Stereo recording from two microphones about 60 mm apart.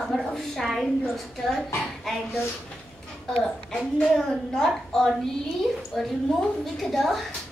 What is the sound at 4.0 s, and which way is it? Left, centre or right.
A woman's voice, centre.